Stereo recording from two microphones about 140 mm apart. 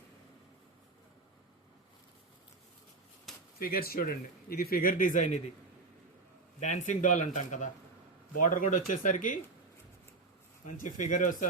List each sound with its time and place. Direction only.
3.3 s a sound: centre (ahead or behind)
3.6 s a man's voice: 90° left; by 5.4 s 65° left (ahead or behind)
6.6 s speech: 60° left (ahead or behind)
10.8 s speech: 65° left (ahead or behind)